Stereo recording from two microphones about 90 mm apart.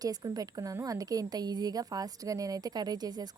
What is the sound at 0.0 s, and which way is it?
A woman's voice, 45° right (ahead or behind).